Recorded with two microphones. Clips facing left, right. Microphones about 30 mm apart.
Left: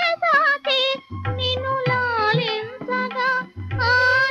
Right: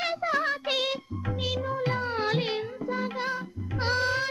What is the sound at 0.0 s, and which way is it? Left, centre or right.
Music, left.